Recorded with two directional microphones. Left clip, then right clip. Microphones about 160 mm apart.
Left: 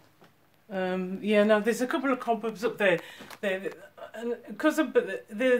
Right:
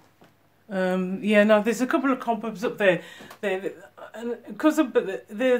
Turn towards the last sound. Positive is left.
turn(degrees=0)  # may be behind; listen again after turning